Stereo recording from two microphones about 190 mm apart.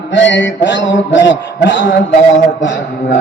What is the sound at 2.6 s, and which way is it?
Speech, 80° left.